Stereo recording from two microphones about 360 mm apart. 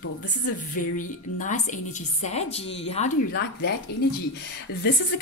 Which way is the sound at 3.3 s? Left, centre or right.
Left.